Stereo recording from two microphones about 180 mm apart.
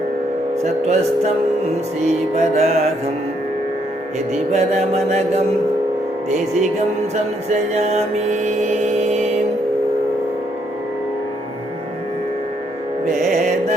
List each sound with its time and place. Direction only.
0.6 s mantra: 35° right (ahead or behind)
4.5 s mantra: 35° right (ahead or behind)
7.5 s mantra: 40° right (ahead or behind)